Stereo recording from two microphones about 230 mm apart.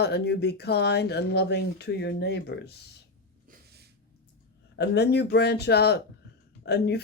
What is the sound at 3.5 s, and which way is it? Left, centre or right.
Snort, right.